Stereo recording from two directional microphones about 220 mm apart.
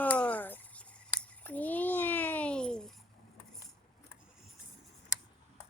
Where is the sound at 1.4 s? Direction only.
5° left (ahead or behind).